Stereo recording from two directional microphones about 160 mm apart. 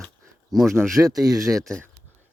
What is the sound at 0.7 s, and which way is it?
Speech, 20° right (ahead or behind).